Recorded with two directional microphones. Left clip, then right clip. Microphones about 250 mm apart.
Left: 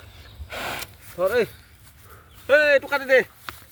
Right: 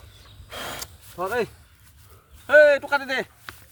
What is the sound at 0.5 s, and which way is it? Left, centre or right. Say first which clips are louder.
Gasp: left 3 dB; centre.